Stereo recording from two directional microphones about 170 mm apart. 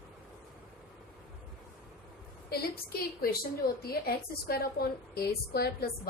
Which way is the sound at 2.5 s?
65° left (ahead or behind).